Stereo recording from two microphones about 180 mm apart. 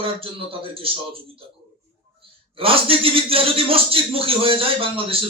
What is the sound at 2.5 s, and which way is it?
A man's voice, 30° right (ahead or behind).